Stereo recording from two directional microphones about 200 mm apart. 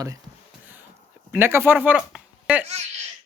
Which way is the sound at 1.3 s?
10° right (ahead or behind).